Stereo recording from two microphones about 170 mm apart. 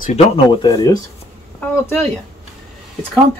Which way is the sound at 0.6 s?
20° left (ahead or behind).